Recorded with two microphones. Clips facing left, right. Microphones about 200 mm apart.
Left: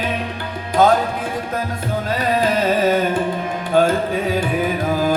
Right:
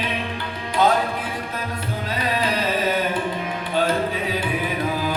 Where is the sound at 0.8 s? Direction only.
45° left (ahead or behind).